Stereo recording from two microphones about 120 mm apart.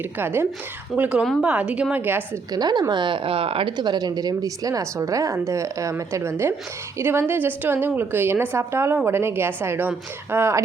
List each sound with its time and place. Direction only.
0.2 s a woman's voice: 20° right (ahead or behind)
2.5 s a woman's voice: 35° right (ahead or behind); by 10.6 s 20° right (ahead or behind)